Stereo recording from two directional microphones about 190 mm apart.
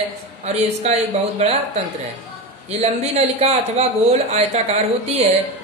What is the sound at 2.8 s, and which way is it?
Speech, 35° right (ahead or behind).